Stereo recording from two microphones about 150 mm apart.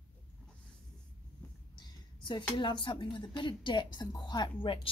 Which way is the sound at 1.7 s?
30° left (ahead or behind).